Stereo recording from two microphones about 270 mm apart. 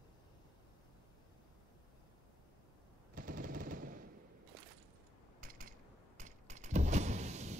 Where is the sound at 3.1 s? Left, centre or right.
Right.